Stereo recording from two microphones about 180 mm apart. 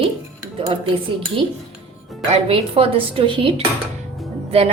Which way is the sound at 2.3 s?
30° right (ahead or behind).